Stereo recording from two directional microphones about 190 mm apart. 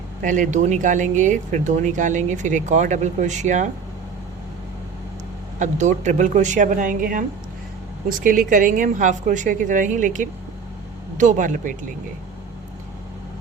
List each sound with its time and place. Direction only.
0.2 s speech: 40° right (ahead or behind)
5.5 s a woman's voice: 40° right (ahead or behind)